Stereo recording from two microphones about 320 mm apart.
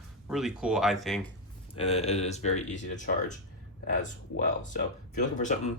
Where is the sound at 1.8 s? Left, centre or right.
Centre.